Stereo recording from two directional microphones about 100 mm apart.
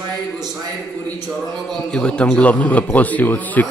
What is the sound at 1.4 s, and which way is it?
A man's voice, 5° left (ahead or behind).